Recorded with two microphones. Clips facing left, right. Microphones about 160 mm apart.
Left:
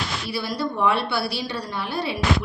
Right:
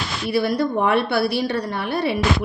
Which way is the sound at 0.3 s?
60° right (ahead or behind).